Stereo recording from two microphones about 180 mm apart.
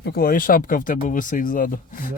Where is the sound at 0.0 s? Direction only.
55° left (ahead or behind).